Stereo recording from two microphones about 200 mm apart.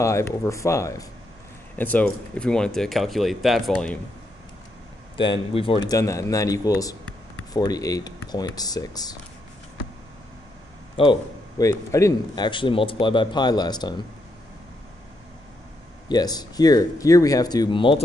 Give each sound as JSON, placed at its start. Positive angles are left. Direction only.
{"t": 0.0, "sound": "speech", "side_deg": 15}
{"t": 5.1, "sound": "speech", "side_deg": 25}
{"t": 5.9, "sound": "speech", "side_deg": 15}
{"t": 11.0, "sound": "speech", "side_deg": 20}
{"t": 16.1, "sound": "speech", "side_deg": 20}